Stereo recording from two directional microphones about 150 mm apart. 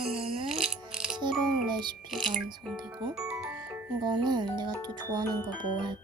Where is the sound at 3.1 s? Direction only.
5° right (ahead or behind).